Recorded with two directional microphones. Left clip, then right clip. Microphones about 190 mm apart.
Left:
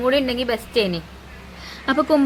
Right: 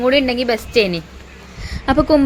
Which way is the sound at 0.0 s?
20° right (ahead or behind).